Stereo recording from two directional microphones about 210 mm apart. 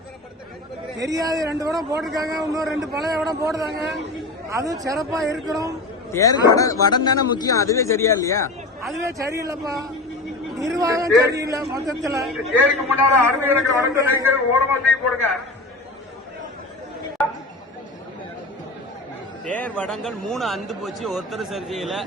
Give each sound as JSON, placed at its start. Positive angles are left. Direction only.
{"t": 0.9, "sound": "a man's voice", "side_deg": -15}
{"t": 6.1, "sound": "speech", "side_deg": 15}
{"t": 9.0, "sound": "a man's voice", "side_deg": -15}
{"t": 17.2, "sound": "chatter", "side_deg": 5}
{"t": 19.5, "sound": "a man's voice", "side_deg": 5}